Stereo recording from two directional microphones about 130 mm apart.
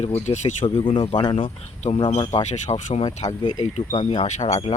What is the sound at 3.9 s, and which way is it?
Speech, 35° left (ahead or behind).